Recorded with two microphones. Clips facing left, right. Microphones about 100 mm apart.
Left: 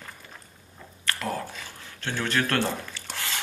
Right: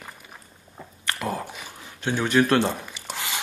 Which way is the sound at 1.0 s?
15° right (ahead or behind).